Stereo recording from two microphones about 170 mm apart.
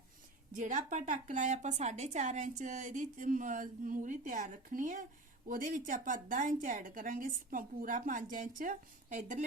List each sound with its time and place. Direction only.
0.5 s a woman's voice: 45° right (ahead or behind)